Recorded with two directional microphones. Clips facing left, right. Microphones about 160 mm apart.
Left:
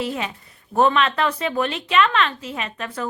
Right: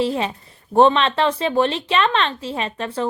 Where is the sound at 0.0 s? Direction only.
30° right (ahead or behind).